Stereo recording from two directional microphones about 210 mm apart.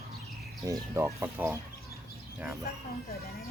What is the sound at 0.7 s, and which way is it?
Speech, 15° right (ahead or behind).